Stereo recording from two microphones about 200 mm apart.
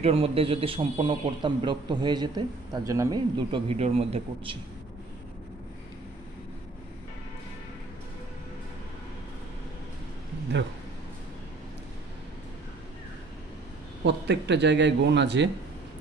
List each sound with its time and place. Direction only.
0.0 s a man's voice: 30° right (ahead or behind)
14.0 s a man's voice: 60° right (ahead or behind)